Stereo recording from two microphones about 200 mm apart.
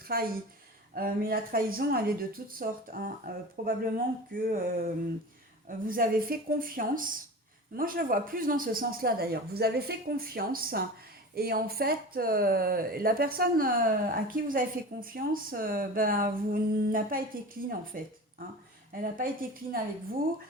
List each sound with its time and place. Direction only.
0.1 s speech: 50° right (ahead or behind)